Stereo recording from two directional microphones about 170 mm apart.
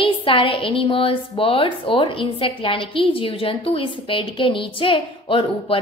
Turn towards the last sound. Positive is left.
turn(degrees=30)  # may be behind; listen again after turning